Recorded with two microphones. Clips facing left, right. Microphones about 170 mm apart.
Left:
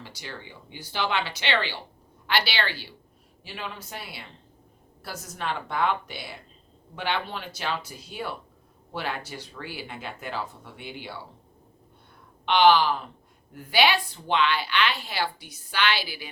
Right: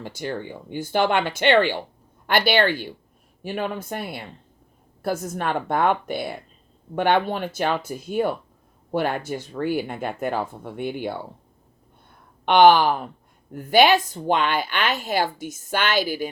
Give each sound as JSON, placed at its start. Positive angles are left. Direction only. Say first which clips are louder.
{"t": 0.0, "sound": "a woman's voice", "louder": "right 11 dB", "side_deg": -50}
{"t": 12.5, "sound": "a woman's voice", "louder": "right 5 dB", "side_deg": -50}